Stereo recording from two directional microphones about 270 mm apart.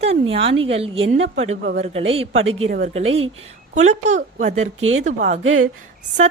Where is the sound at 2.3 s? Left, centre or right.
Right.